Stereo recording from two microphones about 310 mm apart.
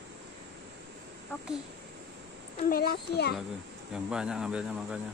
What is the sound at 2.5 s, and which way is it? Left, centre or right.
Speech, left.